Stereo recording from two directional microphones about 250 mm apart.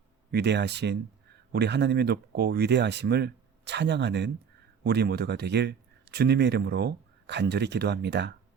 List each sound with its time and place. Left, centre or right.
0.3 s speech: right